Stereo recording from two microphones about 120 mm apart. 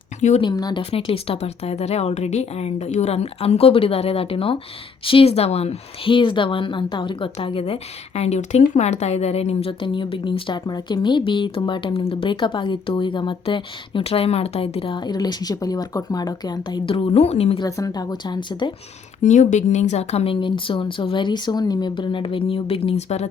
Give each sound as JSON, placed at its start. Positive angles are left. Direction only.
{"t": 0.2, "sound": "speech", "side_deg": 75}
{"t": 0.4, "sound": "speech", "side_deg": 35}
{"t": 0.8, "sound": "speech", "side_deg": 50}
{"t": 17.6, "sound": "speech", "side_deg": 25}
{"t": 19.2, "sound": "speech", "side_deg": 90}